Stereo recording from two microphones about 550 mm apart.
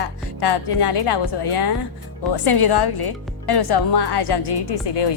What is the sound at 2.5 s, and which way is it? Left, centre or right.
A woman's voice, left.